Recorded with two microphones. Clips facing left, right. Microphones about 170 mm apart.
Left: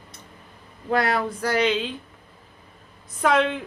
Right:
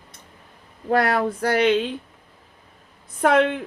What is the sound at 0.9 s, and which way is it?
A woman's voice, 55° right (ahead or behind).